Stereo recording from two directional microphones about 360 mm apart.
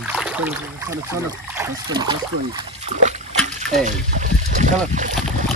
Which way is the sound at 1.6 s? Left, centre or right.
Centre.